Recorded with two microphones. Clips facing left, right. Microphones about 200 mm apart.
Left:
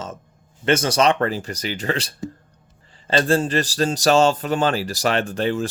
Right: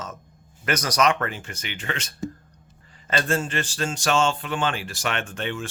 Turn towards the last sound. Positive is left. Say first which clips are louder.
# left 8 dB
turn(degrees=35)  # may be behind; listen again after turning